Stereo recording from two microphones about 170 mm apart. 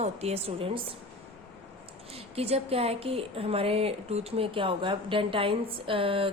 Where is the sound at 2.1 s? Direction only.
35° right (ahead or behind).